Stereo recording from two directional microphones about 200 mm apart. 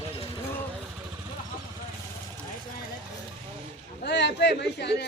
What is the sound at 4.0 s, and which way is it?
A man's voice, 60° left (ahead or behind).